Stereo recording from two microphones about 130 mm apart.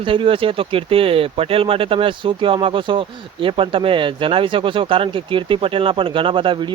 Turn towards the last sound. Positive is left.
turn(degrees=-40)  # may be behind; listen again after turning